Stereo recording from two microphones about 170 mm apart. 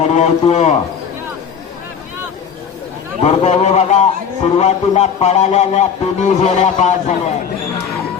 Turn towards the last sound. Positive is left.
turn(degrees=40)  # may be behind; listen again after turning